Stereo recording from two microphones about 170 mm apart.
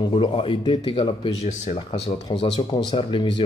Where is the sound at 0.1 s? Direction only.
35° left (ahead or behind).